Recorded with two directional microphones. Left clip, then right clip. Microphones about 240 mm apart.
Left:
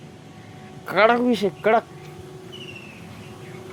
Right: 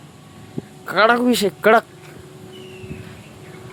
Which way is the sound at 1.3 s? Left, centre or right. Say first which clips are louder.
Right 5 dB; centre.